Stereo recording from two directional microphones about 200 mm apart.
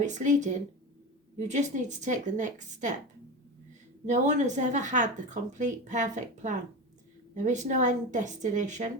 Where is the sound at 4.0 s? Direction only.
35° right (ahead or behind).